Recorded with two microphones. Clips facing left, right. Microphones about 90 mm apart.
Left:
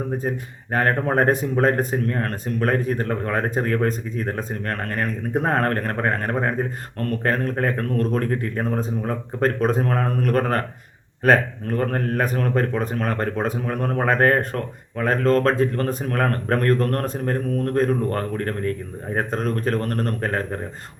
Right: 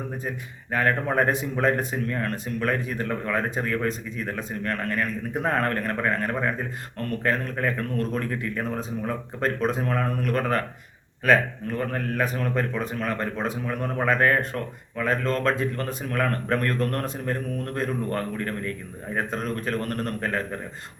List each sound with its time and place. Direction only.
0.2 s a man's voice: 45° left (ahead or behind)